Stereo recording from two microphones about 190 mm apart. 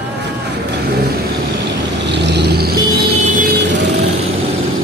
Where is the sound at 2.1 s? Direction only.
65° right (ahead or behind).